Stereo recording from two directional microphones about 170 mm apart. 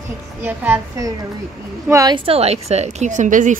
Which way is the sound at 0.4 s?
15° right (ahead or behind).